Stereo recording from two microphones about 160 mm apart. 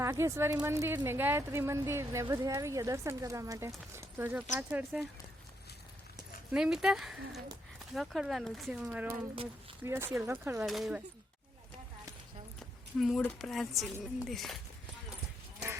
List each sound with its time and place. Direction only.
0.0 s speech: 20° right (ahead or behind)
6.5 s speech: 5° right (ahead or behind)
10.6 s speech: centre (ahead or behind)
12.5 s speech: centre (ahead or behind)